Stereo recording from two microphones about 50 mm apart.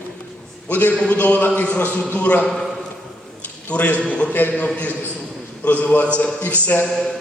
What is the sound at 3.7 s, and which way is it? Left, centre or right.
Speech, left.